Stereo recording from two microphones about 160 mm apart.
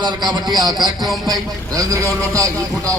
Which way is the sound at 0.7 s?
Centre (ahead or behind).